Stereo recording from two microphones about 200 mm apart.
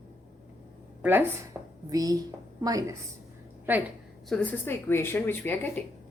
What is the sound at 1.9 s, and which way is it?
A woman's voice, 20° right (ahead or behind).